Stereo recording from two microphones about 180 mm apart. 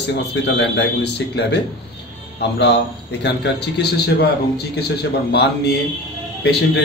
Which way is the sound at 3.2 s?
70° left (ahead or behind).